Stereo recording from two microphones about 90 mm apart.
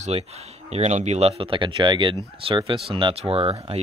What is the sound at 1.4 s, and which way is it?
Speech, 70° right (ahead or behind).